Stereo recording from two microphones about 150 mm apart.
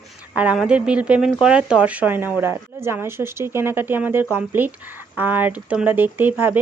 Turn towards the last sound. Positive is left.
turn(degrees=-15)  # may be behind; listen again after turning